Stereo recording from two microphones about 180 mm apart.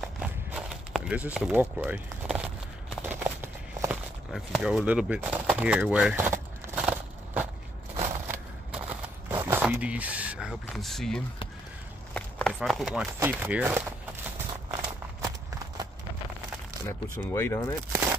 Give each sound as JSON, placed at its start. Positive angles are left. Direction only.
{"t": 0.0, "sound": "walk", "side_deg": -5}
{"t": 4.3, "sound": "speech", "side_deg": 0}
{"t": 7.9, "sound": "crushing", "side_deg": -35}
{"t": 8.3, "sound": "a sound", "side_deg": -10}
{"t": 13.2, "sound": "speech", "side_deg": -10}
{"t": 16.8, "sound": "speech", "side_deg": 15}